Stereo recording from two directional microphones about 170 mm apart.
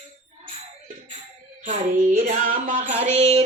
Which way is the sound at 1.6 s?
40° right (ahead or behind).